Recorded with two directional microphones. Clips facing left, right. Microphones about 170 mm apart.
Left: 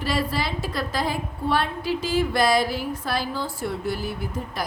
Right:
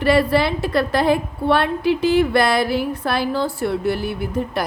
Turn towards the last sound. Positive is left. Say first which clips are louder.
# right 7 dB
turn(degrees=-65)  # may be behind; listen again after turning